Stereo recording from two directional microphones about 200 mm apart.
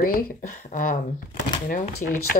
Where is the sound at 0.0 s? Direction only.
40° left (ahead or behind).